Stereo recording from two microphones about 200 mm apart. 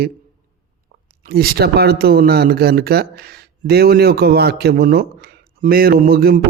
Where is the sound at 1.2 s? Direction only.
50° right (ahead or behind).